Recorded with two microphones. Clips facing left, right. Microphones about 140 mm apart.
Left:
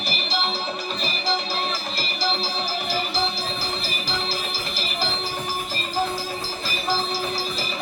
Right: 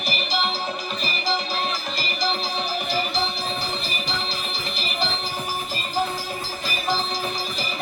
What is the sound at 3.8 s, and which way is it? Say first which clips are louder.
Music: left 1 dB; centre (ahead or behind).